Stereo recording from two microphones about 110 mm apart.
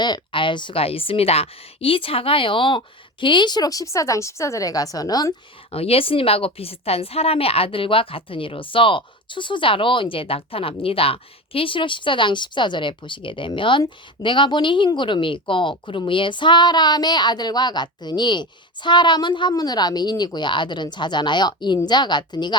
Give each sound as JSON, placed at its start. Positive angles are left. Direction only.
{"t": 0.0, "sound": "a woman's voice", "side_deg": 45}
{"t": 5.7, "sound": "a woman's voice", "side_deg": 60}